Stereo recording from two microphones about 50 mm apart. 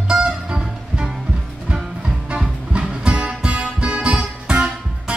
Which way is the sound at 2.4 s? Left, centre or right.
Right.